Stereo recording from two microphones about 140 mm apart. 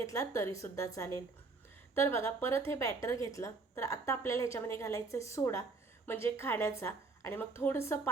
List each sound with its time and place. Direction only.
0.0 s a woman's voice: 20° left (ahead or behind)